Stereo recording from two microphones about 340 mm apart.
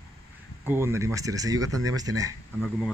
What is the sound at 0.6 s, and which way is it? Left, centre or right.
Speech, centre.